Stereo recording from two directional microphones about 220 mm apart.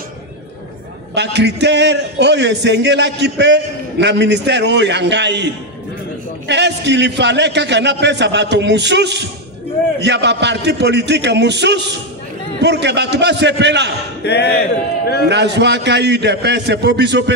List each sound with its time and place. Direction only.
1.1 s a man's voice: 50° right (ahead or behind)
14.2 s speech: 50° left (ahead or behind)
15.2 s a man's voice: 50° right (ahead or behind)